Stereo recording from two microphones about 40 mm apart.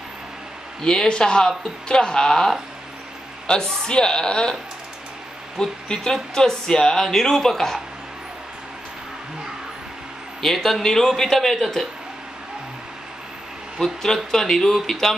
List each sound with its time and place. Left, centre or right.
0.8 s a woman's voice: centre
5.6 s a woman's voice: centre
10.4 s a woman's voice: centre
13.7 s a woman's voice: centre